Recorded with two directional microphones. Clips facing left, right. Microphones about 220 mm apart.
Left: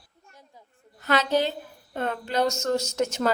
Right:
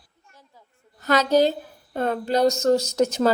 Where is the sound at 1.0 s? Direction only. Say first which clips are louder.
Right 5 dB; 40° right (ahead or behind).